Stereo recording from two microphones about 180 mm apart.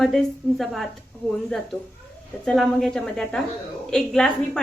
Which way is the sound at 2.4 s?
Centre (ahead or behind).